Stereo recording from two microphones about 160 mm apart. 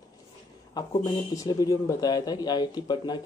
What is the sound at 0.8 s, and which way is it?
Speech, 25° left (ahead or behind).